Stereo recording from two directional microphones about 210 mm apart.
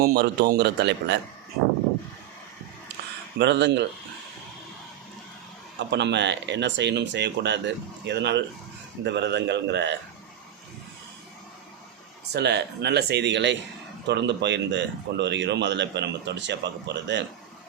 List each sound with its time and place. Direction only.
0.0 s speech: 45° right (ahead or behind)
3.3 s speech: 55° right (ahead or behind)
5.9 s speech: 55° right (ahead or behind)
12.3 s speech: 50° right (ahead or behind)